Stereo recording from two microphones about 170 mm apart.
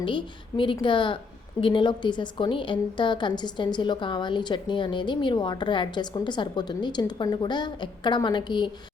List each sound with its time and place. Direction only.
0.0 s a woman's voice: 30° left (ahead or behind)